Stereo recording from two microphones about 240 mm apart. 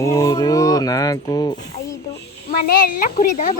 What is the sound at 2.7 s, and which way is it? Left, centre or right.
Speech, left.